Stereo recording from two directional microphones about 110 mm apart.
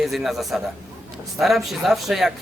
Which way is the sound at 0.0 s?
Centre (ahead or behind).